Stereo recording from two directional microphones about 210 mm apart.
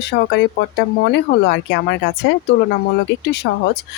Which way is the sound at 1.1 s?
55° left (ahead or behind).